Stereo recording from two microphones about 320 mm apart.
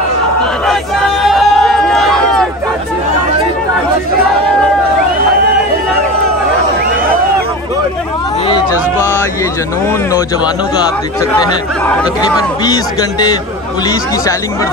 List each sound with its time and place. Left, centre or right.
0.7 s crowd: centre
8.5 s music: centre
11.1 s speech: centre